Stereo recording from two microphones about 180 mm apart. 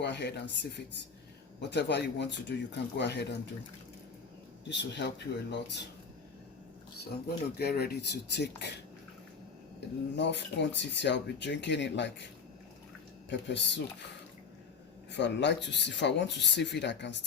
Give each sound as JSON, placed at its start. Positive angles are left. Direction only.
{"t": 0.0, "sound": "speech", "side_deg": 70}
{"t": 4.7, "sound": "speech", "side_deg": 75}
{"t": 7.6, "sound": "speech", "side_deg": 60}
{"t": 10.2, "sound": "speech", "side_deg": 75}
{"t": 13.5, "sound": "speech", "side_deg": 75}
{"t": 15.1, "sound": "speech", "side_deg": 75}